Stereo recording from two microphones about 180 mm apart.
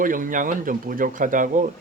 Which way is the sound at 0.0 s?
50° right (ahead or behind).